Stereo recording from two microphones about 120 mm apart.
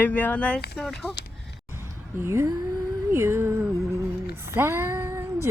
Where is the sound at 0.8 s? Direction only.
Centre (ahead or behind).